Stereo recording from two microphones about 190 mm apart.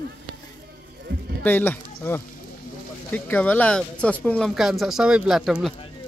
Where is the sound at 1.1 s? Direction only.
55° right (ahead or behind).